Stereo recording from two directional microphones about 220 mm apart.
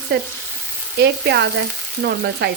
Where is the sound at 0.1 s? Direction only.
50° right (ahead or behind).